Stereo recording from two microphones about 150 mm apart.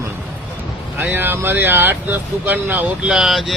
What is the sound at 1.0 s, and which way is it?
Speech, 10° right (ahead or behind).